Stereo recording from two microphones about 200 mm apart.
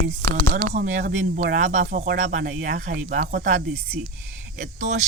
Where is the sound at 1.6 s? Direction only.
40° right (ahead or behind).